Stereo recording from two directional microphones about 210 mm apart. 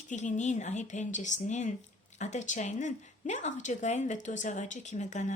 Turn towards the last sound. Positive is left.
turn(degrees=35)  # may be behind; listen again after turning